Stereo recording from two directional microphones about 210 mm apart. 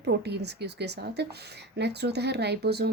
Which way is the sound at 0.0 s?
50° right (ahead or behind).